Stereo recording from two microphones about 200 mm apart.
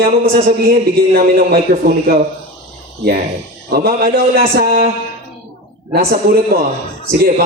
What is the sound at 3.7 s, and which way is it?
A man's voice, 50° right (ahead or behind).